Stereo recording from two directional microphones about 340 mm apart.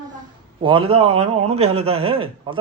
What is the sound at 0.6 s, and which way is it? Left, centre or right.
A man's voice, centre.